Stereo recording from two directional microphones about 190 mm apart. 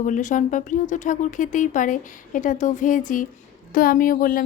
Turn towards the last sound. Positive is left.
turn(degrees=45)  # may be behind; listen again after turning